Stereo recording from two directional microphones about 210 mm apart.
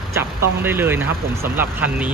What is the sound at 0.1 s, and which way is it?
Speech, 10° right (ahead or behind).